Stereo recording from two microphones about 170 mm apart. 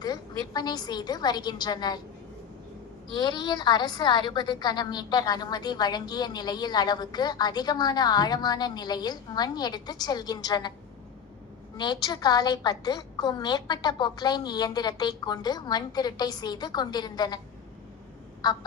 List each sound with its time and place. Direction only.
0.0 s a woman's voice: 25° left (ahead or behind)
3.2 s a woman's voice: 25° left (ahead or behind)
11.8 s a woman's voice: 25° left (ahead or behind)
18.4 s a woman's voice: 25° left (ahead or behind)